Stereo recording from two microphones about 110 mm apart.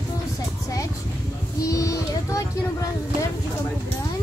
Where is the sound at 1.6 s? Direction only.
30° left (ahead or behind).